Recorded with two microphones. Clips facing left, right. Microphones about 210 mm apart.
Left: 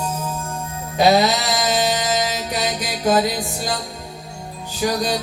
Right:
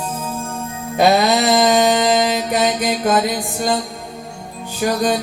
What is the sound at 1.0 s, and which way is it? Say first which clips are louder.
Music: right 2 dB; 55° right (ahead or behind).